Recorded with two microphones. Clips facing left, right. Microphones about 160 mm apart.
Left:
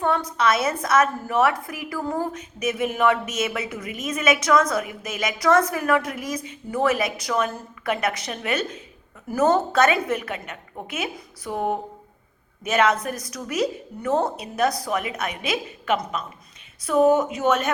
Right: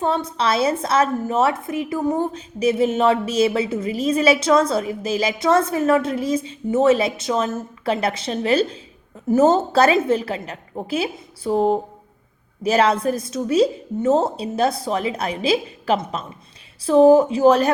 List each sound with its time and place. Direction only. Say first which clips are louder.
0.0 s a woman's voice: right 1 dB; 25° right (ahead or behind)